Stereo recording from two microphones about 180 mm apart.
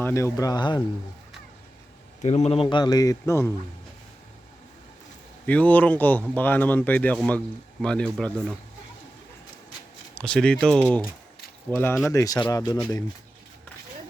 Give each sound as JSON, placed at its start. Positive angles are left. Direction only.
{"t": 0.0, "sound": "speech", "side_deg": 15}
{"t": 2.2, "sound": "speech", "side_deg": 40}
{"t": 5.5, "sound": "speech", "side_deg": 10}
{"t": 10.2, "sound": "speech", "side_deg": 5}